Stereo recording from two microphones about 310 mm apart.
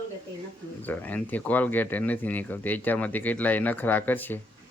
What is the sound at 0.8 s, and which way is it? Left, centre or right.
Speech, centre.